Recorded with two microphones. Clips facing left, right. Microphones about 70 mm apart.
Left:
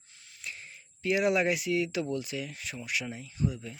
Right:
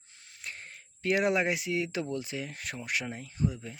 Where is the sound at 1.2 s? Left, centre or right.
Right.